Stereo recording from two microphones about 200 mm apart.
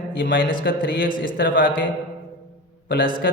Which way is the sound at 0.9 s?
45° left (ahead or behind).